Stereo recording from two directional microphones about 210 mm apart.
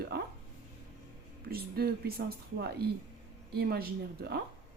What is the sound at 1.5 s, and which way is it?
Speech, 45° right (ahead or behind).